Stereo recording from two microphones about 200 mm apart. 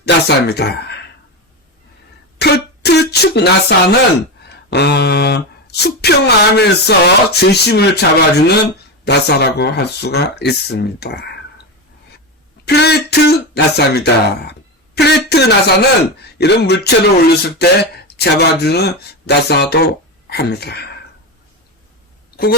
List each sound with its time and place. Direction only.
0.0 s speech: 55° left (ahead or behind)
2.4 s throat clearing: 55° left (ahead or behind)
4.7 s speech: 55° left (ahead or behind)
12.6 s speech: 55° left (ahead or behind)